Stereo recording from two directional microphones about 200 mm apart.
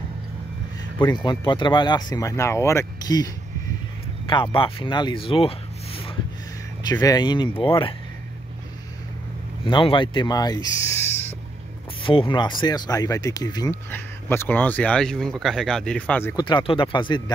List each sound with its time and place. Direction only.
1.0 s speech: 20° left (ahead or behind)
4.3 s speech: 25° left (ahead or behind)
9.7 s speech: 25° left (ahead or behind)
12.0 s speech: 25° left (ahead or behind); by 16.4 s 10° left (ahead or behind)
16.4 s speech: 25° left (ahead or behind)